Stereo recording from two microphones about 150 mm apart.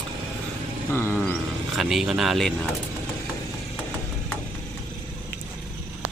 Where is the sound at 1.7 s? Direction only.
Centre (ahead or behind).